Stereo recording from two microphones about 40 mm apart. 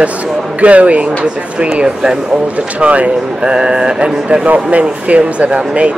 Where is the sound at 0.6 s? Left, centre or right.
Right.